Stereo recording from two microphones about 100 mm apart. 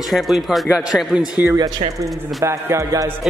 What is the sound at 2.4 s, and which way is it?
Music, 30° right (ahead or behind).